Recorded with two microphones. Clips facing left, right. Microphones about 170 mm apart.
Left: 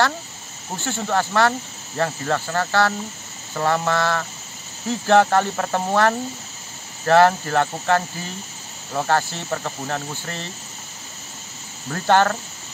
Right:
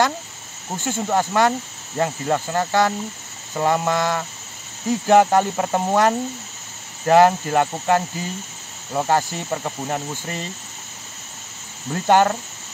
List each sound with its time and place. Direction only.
0.7 s speech: 15° right (ahead or behind)
11.9 s speech: 15° right (ahead or behind)